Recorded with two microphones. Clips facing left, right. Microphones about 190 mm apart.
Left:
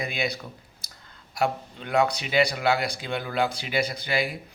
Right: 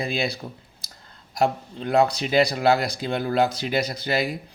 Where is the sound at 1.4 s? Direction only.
35° right (ahead or behind).